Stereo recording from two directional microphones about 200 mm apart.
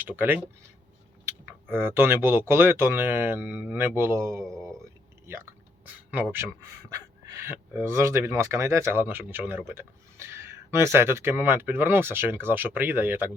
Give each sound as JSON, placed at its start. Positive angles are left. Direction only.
{"t": 0.0, "sound": "speech", "side_deg": -10}
{"t": 5.2, "sound": "a sound", "side_deg": -10}
{"t": 6.9, "sound": "speech", "side_deg": -15}